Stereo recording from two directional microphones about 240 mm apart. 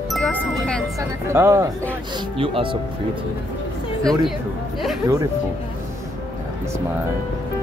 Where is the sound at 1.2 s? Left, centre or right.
Centre.